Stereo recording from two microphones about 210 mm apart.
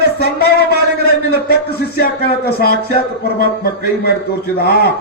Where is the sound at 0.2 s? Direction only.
50° left (ahead or behind).